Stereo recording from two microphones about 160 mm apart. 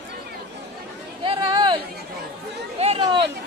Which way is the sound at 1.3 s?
25° right (ahead or behind).